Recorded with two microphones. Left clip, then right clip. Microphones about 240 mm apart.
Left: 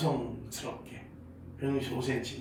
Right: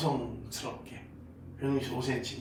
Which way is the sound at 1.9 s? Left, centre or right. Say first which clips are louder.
Even; centre.